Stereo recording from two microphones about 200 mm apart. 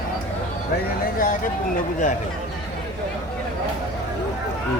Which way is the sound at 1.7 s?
40° left (ahead or behind).